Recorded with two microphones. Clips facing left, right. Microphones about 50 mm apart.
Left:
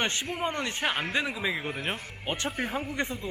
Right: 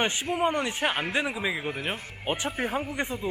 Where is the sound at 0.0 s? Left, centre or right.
Centre.